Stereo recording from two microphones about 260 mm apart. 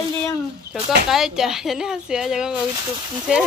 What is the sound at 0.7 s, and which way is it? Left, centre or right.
Speech, centre.